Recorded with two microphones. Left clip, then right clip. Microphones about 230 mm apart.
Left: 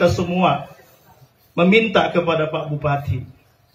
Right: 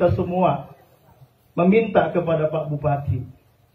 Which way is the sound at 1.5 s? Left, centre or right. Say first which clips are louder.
Left 3 dB; left.